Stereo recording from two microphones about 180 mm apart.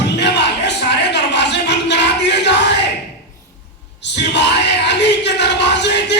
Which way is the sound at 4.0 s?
75° left (ahead or behind).